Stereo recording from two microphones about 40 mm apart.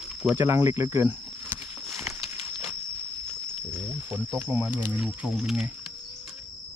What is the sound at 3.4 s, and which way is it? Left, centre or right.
Wild animals, right.